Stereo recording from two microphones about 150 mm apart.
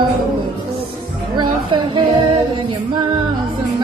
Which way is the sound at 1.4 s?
35° right (ahead or behind).